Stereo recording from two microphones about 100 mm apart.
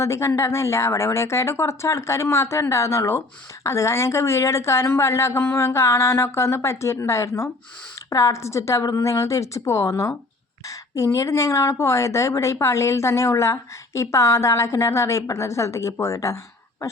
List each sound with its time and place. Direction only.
0.0 s a woman's voice: 30° left (ahead or behind)